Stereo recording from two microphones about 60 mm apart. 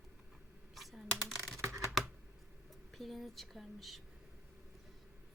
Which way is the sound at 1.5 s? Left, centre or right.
Right.